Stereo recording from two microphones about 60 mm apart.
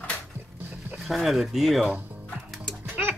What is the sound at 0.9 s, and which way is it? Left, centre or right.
Speech, centre.